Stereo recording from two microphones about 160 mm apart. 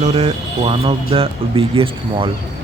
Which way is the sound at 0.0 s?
40° right (ahead or behind).